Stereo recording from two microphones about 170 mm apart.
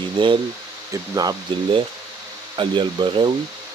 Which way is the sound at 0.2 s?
30° right (ahead or behind).